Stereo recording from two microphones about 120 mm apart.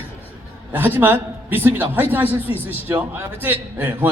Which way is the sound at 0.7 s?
15° right (ahead or behind).